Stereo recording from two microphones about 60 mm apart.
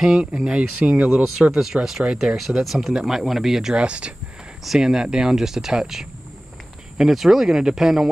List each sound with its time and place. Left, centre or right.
0.0 s speech: centre
1.5 s speech: centre
3.7 s speech: centre